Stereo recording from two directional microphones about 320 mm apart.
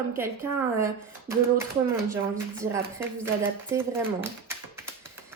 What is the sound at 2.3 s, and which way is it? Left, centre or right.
A woman's voice, centre.